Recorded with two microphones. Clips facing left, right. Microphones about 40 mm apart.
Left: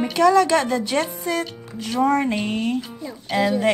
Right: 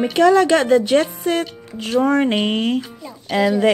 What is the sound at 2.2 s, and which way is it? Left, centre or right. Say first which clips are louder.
Speech: right 5 dB; right.